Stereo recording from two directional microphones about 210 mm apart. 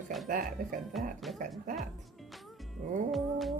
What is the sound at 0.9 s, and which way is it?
Speech, centre (ahead or behind).